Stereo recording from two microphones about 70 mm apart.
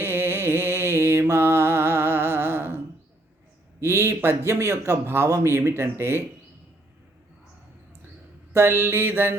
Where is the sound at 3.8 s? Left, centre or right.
Right.